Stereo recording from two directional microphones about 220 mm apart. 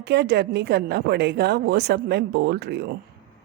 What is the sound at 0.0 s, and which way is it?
Speech, 50° right (ahead or behind).